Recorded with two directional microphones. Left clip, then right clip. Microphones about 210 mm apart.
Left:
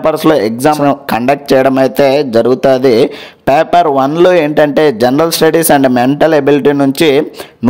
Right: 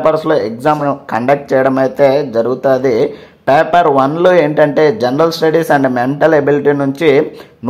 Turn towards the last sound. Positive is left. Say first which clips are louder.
# left 2 dB
turn(degrees=30)  # may be behind; listen again after turning